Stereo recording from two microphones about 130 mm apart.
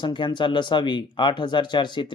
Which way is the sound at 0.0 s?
35° left (ahead or behind).